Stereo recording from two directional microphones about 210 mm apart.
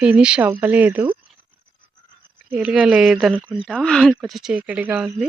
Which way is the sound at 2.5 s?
5° right (ahead or behind).